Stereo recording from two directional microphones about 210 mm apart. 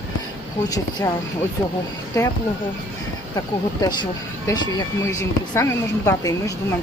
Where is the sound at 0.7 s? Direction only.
15° left (ahead or behind).